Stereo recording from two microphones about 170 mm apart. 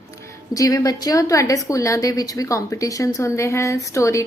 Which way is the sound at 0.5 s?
20° left (ahead or behind).